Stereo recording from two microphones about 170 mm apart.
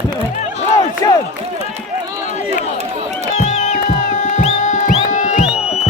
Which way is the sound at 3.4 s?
45° left (ahead or behind).